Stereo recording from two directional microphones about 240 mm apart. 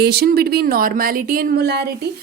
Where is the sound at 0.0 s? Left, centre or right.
Right.